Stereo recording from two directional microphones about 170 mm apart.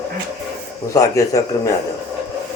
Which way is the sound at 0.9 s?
20° left (ahead or behind).